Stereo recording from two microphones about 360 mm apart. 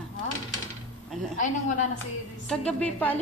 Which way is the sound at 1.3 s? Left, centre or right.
Left.